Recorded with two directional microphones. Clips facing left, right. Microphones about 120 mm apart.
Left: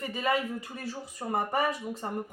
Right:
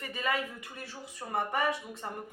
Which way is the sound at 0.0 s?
30° left (ahead or behind).